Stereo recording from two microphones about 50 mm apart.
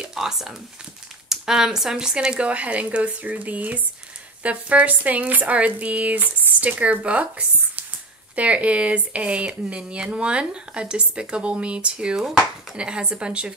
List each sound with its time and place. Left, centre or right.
0.0 s speech: centre